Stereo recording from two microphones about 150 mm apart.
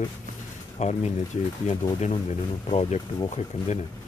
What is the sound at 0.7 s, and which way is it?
Speech, 50° left (ahead or behind).